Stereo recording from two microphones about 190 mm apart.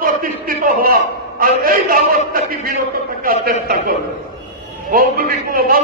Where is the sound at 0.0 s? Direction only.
45° right (ahead or behind).